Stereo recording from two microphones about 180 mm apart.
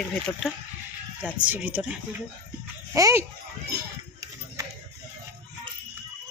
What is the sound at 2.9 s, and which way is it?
Children playing, 15° right (ahead or behind).